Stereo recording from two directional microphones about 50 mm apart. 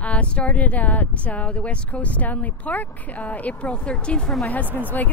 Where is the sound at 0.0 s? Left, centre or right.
Left.